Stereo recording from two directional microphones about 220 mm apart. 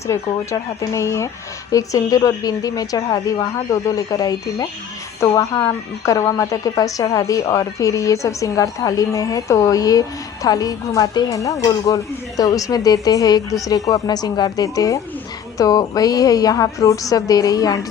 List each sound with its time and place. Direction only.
0.1 s a woman's voice: 15° left (ahead or behind)